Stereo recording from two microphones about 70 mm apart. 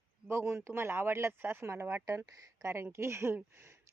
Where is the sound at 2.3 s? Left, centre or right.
Right.